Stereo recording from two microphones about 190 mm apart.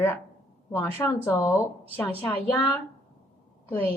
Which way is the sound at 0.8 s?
10° left (ahead or behind).